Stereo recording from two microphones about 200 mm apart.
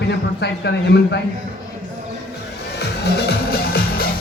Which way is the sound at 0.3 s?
55° left (ahead or behind).